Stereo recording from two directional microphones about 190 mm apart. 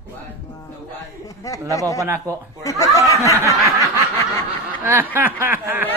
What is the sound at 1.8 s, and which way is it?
Speech, 15° right (ahead or behind).